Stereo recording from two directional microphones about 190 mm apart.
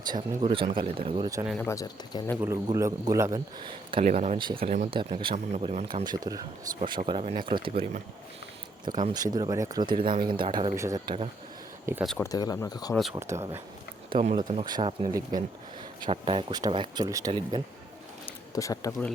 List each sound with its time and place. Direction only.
0.1 s speech: 25° right (ahead or behind)
1.6 s speech: 15° left (ahead or behind)
2.4 s a man's voice: 15° right (ahead or behind)
4.0 s speech: 40° right (ahead or behind)
4.4 s speech: 25° right (ahead or behind)
8.9 s speech: 40° right (ahead or behind)
9.1 s speech: 20° right (ahead or behind)
10.8 s speech: 15° right (ahead or behind)
12.0 s speech: 5° left (ahead or behind)
12.3 s speech: 20° left (ahead or behind)
12.9 s speech: centre (ahead or behind)
13.1 s a man's voice: 15° right (ahead or behind)
14.1 s speech: 30° right (ahead or behind)
18.3 s a sound: 15° left (ahead or behind)